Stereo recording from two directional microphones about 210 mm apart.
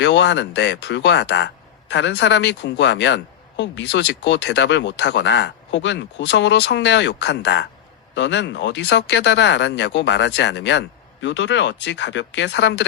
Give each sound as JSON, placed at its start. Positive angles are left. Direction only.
{"t": 0.0, "sound": "speech", "side_deg": 60}